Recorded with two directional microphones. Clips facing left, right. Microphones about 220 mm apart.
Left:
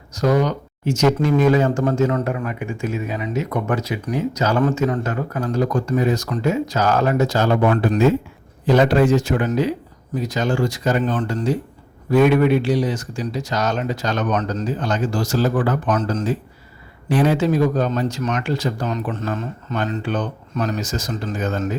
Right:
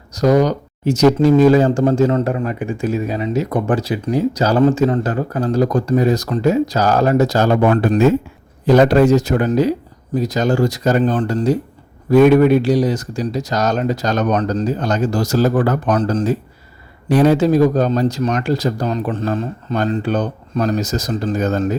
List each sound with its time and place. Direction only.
0.1 s speech: 35° right (ahead or behind)